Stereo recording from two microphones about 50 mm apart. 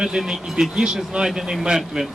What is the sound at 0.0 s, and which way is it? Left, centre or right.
Speech, centre.